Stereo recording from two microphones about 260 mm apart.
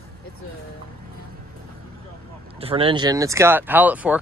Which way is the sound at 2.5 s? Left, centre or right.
Right.